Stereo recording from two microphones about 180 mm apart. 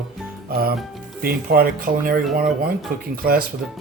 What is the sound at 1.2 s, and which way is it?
Speech, 55° right (ahead or behind).